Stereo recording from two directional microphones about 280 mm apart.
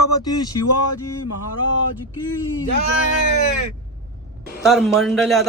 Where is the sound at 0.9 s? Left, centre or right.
Left.